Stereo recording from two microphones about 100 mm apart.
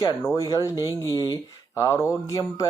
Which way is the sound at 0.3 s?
35° left (ahead or behind).